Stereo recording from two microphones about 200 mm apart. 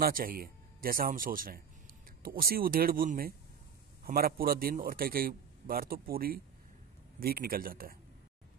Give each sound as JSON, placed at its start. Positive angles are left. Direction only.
{"t": 0.0, "sound": "a man's voice", "side_deg": -45}